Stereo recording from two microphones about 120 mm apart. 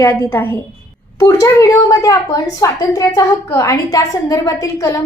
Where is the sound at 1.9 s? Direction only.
30° left (ahead or behind).